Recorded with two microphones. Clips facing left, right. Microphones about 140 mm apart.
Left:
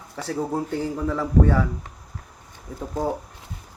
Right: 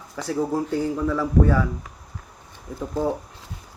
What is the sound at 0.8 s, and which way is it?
Speech, 30° left (ahead or behind).